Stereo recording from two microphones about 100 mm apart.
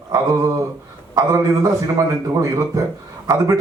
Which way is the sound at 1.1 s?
35° right (ahead or behind).